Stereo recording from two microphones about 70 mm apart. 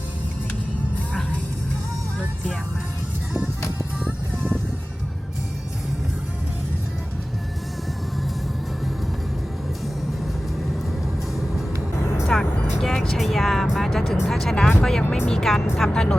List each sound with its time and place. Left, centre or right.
12.0 s music: left
12.3 s music: centre
15.8 s speech: centre